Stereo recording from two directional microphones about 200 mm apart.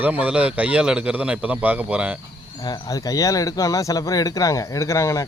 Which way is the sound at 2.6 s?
20° left (ahead or behind).